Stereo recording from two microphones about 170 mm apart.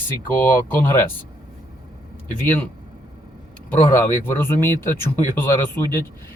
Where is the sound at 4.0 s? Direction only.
15° left (ahead or behind).